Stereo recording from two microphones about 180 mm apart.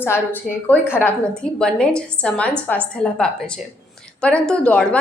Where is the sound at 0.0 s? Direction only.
10° left (ahead or behind).